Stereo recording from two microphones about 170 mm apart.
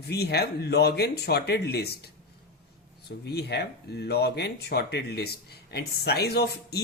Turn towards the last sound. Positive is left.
turn(degrees=75)  # may be behind; listen again after turning